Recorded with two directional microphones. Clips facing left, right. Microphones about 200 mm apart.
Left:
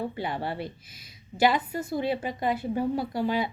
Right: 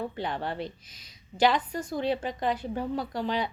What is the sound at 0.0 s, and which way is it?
A woman's voice, 10° left (ahead or behind).